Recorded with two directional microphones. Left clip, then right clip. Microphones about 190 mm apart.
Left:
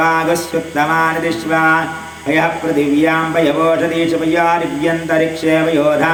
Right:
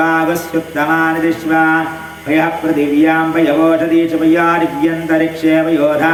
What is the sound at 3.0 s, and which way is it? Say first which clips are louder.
Mantra: right 4 dB; 30° left (ahead or behind).